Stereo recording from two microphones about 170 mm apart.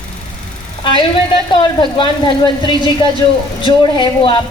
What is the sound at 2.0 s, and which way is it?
Speech, 25° left (ahead or behind).